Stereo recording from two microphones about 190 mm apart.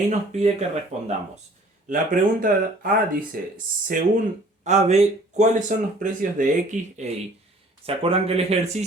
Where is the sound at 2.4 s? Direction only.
50° right (ahead or behind).